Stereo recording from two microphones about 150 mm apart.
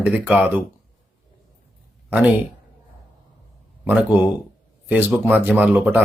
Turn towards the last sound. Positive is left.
turn(degrees=-10)  # may be behind; listen again after turning